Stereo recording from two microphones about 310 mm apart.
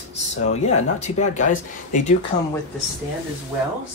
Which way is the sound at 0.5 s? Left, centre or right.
Left.